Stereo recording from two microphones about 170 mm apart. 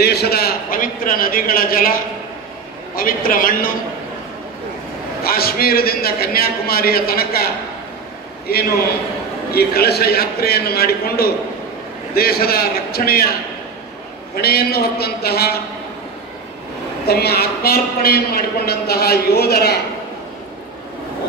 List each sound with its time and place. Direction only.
0.0 s a man's voice: 70° left (ahead or behind)
3.0 s a man's voice: 60° left (ahead or behind)
5.2 s a man's voice: 60° left (ahead or behind)
8.5 s a man's voice: 65° left (ahead or behind)
14.3 s a man's voice: 65° left (ahead or behind)
17.0 s a man's voice: 70° left (ahead or behind)